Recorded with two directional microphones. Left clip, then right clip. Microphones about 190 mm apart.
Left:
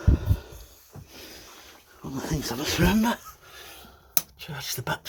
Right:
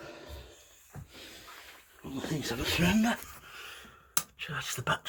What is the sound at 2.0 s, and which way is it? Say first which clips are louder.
Speech: left 4 dB; 10° left (ahead or behind).